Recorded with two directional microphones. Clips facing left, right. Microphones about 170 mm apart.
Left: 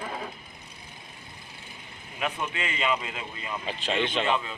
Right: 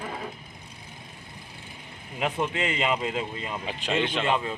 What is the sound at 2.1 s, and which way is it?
Speech, 30° right (ahead or behind).